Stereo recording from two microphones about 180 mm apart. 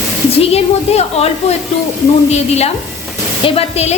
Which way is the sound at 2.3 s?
35° left (ahead or behind).